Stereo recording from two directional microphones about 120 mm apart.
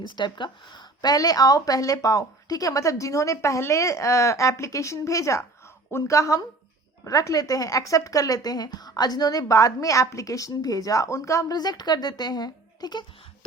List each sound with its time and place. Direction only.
0.0 s speech: 40° left (ahead or behind)